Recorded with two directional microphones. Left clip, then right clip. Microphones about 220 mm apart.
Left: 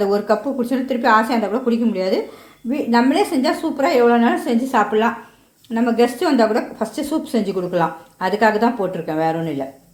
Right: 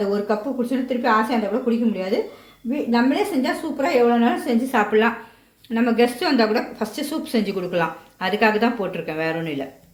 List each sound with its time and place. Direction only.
0.0 s a woman's voice: 25° left (ahead or behind)